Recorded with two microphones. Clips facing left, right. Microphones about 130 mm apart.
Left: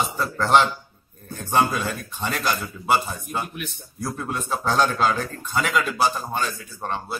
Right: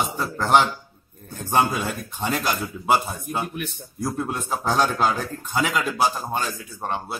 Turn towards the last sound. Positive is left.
turn(degrees=-10)  # may be behind; listen again after turning